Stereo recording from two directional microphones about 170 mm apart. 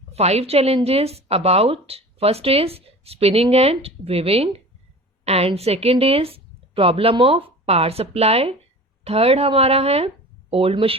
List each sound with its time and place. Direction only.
0.1 s a woman's voice: 40° right (ahead or behind)